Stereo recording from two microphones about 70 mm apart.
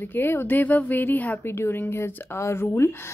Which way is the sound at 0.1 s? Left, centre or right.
Left.